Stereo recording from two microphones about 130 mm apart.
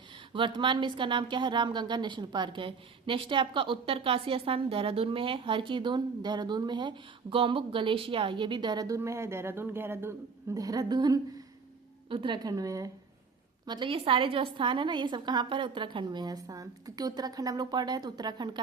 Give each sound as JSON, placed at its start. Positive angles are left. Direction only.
{"t": 0.3, "sound": "a woman's voice", "side_deg": -40}
{"t": 9.0, "sound": "a woman's voice", "side_deg": -20}
{"t": 13.7, "sound": "a woman's voice", "side_deg": -40}